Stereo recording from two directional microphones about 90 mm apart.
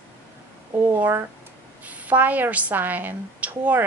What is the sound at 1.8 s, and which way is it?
A woman's voice, 15° right (ahead or behind).